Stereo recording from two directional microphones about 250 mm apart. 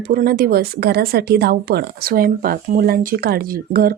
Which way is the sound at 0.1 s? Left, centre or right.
Right.